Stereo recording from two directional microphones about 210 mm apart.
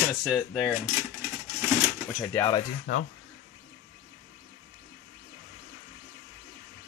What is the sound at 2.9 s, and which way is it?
Speech, 60° left (ahead or behind).